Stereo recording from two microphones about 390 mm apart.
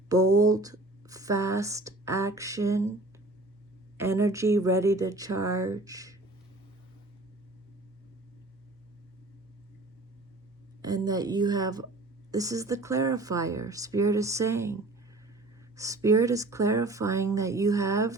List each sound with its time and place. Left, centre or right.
0.1 s speech: centre
3.9 s speech: centre
10.8 s speech: centre